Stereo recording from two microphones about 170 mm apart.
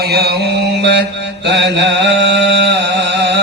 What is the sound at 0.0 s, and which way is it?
Mantra, 70° right (ahead or behind).